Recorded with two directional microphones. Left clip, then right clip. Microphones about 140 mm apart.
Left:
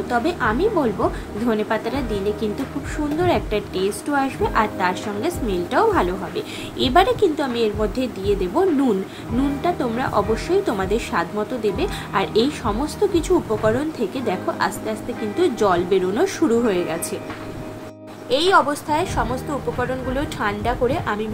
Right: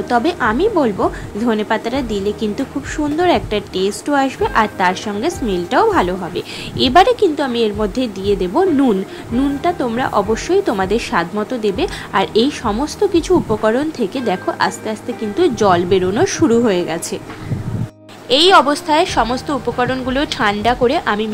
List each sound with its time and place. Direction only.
0.1 s a woman's voice: 40° right (ahead or behind)
18.3 s a woman's voice: 45° right (ahead or behind)